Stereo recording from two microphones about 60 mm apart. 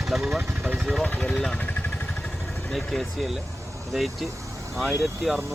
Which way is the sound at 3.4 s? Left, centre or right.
Right.